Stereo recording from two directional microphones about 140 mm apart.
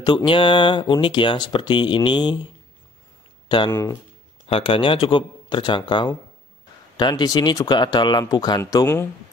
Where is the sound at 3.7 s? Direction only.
20° left (ahead or behind).